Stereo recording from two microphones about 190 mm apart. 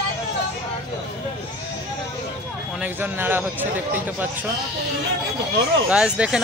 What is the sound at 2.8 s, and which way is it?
Speech, 10° right (ahead or behind).